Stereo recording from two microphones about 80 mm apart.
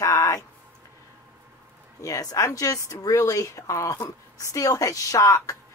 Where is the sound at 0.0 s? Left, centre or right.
Left.